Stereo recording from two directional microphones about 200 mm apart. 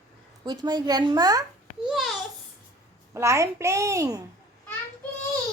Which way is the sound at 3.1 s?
15° right (ahead or behind).